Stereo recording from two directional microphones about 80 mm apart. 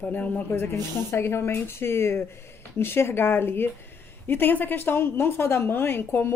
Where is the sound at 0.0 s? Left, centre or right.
Centre.